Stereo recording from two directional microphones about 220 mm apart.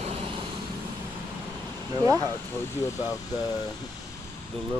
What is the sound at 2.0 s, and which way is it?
Speech, 15° right (ahead or behind).